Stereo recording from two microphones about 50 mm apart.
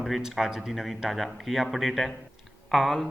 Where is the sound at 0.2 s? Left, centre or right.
Centre.